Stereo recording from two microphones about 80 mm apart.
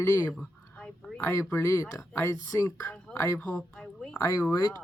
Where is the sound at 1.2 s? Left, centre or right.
Left.